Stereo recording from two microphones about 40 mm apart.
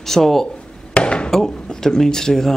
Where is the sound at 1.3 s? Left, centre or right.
Centre.